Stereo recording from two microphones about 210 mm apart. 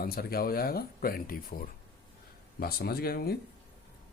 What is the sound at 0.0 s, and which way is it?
Speech, 45° left (ahead or behind).